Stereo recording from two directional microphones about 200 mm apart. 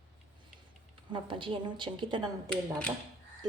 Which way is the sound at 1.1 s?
25° right (ahead or behind).